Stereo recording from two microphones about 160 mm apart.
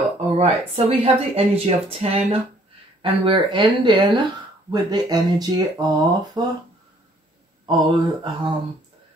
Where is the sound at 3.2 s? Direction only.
30° right (ahead or behind).